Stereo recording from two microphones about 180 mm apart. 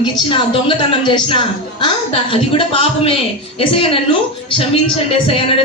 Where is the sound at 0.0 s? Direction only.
30° left (ahead or behind).